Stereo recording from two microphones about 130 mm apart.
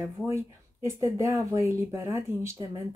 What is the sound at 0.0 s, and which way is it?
Speech, 20° right (ahead or behind).